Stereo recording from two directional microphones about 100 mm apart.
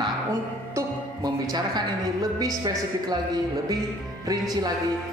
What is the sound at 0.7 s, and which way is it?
Music, 40° right (ahead or behind).